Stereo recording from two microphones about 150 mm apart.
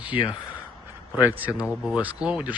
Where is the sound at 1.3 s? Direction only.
10° right (ahead or behind).